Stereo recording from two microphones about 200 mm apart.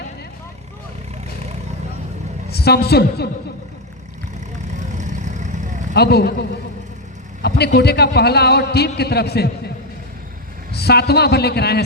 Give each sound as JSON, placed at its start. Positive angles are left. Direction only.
{"t": 2.5, "sound": "a woman's voice", "side_deg": 55}
{"t": 4.9, "sound": "vehicle", "side_deg": -35}
{"t": 5.9, "sound": "a man's voice", "side_deg": 55}
{"t": 7.4, "sound": "a man's voice", "side_deg": 55}